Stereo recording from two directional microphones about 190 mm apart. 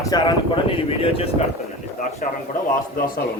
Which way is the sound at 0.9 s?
30° left (ahead or behind).